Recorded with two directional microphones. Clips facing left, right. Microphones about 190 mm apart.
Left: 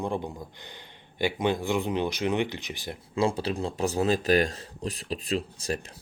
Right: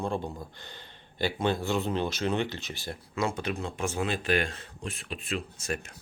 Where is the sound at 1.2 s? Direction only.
15° left (ahead or behind).